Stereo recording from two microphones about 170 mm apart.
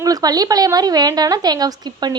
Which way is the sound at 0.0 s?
20° right (ahead or behind).